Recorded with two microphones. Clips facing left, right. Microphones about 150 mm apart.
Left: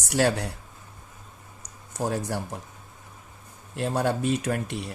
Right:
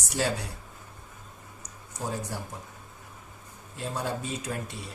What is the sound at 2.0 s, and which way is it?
Speech, 70° left (ahead or behind).